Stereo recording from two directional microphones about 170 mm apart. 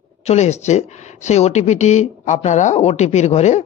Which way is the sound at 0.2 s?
40° left (ahead or behind).